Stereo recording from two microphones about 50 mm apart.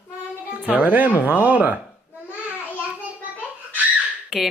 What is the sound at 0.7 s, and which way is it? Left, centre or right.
Speech, right.